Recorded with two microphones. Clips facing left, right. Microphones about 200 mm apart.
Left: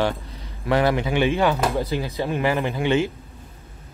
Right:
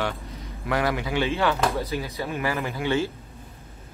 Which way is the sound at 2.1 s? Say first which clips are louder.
Left 7 dB; 25° left (ahead or behind).